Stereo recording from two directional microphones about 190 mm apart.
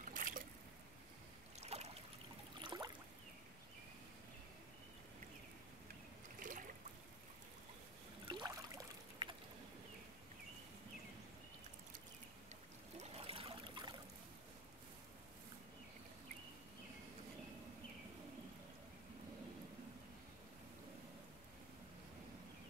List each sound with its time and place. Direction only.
0.1 s trickle: 45° right (ahead or behind)
1.6 s boat: 35° right (ahead or behind)
2.6 s a sound: 25° right (ahead or behind)
6.4 s a sound: 45° right (ahead or behind)
8.3 s trickle: 20° right (ahead or behind)
12.9 s trickle: 35° right (ahead or behind)